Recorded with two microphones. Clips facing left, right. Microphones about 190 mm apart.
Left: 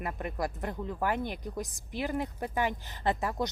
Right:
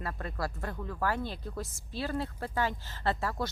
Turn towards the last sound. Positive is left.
turn(degrees=15)  # may be behind; listen again after turning